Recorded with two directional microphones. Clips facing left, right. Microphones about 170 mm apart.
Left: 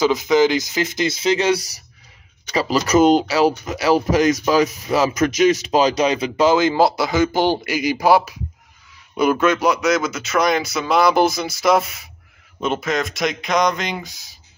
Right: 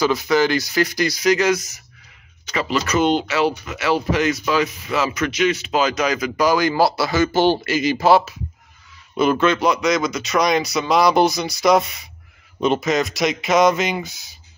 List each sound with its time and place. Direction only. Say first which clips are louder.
0.0 s speech: left 2 dB; 20° left (ahead or behind); by 14.3 s centre (ahead or behind)